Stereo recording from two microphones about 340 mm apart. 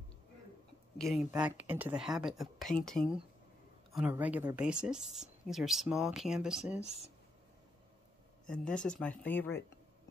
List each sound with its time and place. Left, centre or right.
0.9 s speech: centre
8.5 s speech: centre